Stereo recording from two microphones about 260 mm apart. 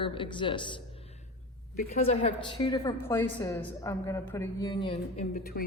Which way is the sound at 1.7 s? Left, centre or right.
Left.